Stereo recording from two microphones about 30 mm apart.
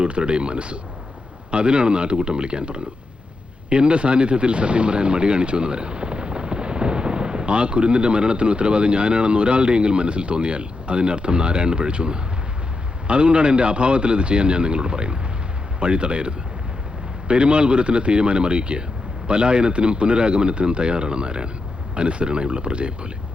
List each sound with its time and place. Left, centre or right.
0.0 s speech: right